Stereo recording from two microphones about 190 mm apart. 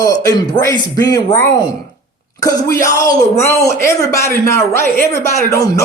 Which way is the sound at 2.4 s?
15° left (ahead or behind).